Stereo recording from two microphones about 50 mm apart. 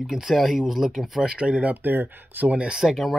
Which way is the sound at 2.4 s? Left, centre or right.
Right.